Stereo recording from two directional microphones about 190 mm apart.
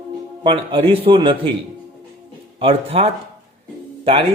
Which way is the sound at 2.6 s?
30° right (ahead or behind).